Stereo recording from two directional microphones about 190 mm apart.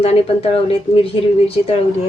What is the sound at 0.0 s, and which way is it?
Speech, 30° left (ahead or behind).